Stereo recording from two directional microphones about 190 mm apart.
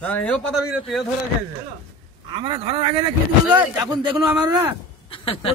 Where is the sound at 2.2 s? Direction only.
25° right (ahead or behind).